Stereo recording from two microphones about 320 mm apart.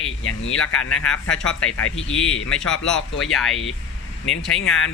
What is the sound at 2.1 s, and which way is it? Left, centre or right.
Speech, left.